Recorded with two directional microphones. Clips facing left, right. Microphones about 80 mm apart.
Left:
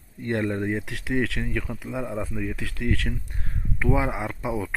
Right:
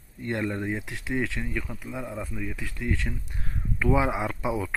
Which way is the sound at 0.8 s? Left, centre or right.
Left.